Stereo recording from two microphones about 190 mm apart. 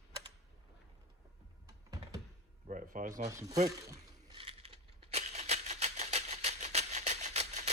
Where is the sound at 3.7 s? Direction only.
20° right (ahead or behind).